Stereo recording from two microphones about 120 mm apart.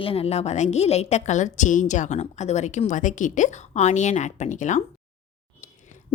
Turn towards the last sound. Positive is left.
turn(degrees=90)